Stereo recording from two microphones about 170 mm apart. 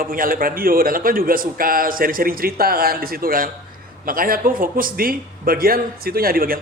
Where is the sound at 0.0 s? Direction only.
55° right (ahead or behind).